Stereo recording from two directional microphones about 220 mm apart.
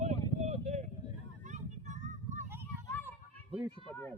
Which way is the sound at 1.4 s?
35° right (ahead or behind).